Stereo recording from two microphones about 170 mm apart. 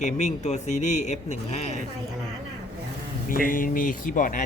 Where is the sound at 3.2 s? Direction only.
55° left (ahead or behind).